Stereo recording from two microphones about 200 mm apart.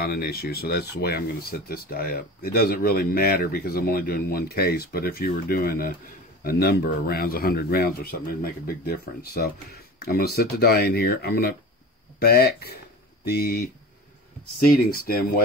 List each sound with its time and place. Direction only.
0.0 s speech: 50° left (ahead or behind)
14.7 s speech: 50° left (ahead or behind)